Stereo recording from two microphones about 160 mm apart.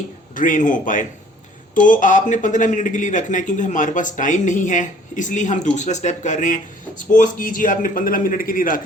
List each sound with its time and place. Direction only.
0.3 s a man's voice: 55° left (ahead or behind)